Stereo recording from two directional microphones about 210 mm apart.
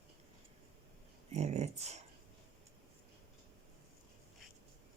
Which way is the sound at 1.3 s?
30° right (ahead or behind).